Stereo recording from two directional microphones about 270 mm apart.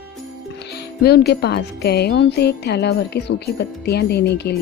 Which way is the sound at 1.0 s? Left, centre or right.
Left.